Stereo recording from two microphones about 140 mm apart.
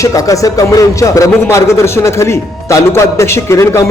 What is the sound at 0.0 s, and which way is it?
A man's voice, 25° left (ahead or behind).